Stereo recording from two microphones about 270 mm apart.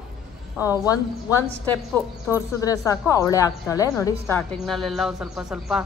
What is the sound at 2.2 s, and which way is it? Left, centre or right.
A woman's voice, centre.